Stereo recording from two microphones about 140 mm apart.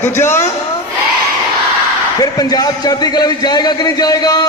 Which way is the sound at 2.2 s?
25° left (ahead or behind).